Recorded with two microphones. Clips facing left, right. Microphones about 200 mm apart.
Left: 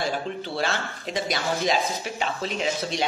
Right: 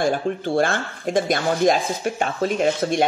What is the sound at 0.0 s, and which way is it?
Speech, 50° right (ahead or behind).